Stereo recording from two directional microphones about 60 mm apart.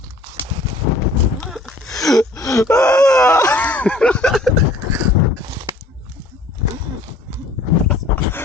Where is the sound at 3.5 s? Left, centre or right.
Left.